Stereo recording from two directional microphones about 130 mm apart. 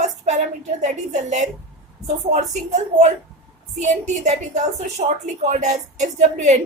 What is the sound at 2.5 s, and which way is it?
A woman's voice, 65° right (ahead or behind).